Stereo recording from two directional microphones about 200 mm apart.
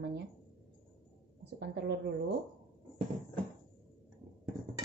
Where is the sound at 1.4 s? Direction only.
55° right (ahead or behind).